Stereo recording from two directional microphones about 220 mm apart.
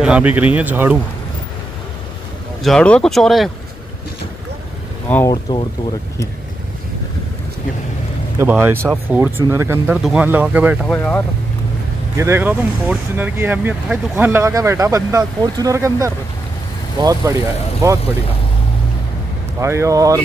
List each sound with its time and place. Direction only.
0.0 s speech: 5° right (ahead or behind)
2.6 s speech: 5° left (ahead or behind)
5.1 s speech: 15° left (ahead or behind)
8.4 s speech: 10° right (ahead or behind)
10.9 s speech: 10° left (ahead or behind)
12.2 s speech: 10° right (ahead or behind)
19.6 s speech: 10° right (ahead or behind)